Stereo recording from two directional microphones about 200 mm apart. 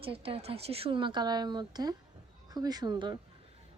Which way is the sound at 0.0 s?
30° right (ahead or behind).